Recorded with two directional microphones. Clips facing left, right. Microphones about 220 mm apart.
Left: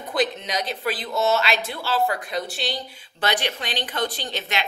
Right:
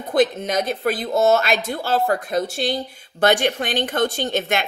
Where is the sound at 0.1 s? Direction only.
50° right (ahead or behind).